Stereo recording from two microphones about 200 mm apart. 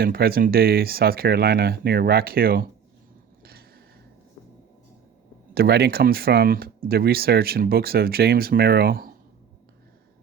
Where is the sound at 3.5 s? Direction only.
50° right (ahead or behind).